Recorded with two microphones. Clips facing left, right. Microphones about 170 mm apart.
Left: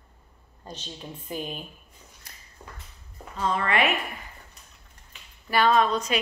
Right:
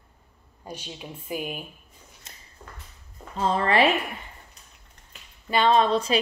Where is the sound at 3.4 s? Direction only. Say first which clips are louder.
Right 3 dB; 30° right (ahead or behind).